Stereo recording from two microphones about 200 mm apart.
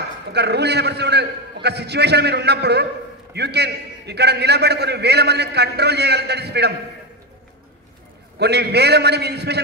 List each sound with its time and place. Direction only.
0.3 s a man's voice: 55° right (ahead or behind)
8.4 s a man's voice: 55° right (ahead or behind)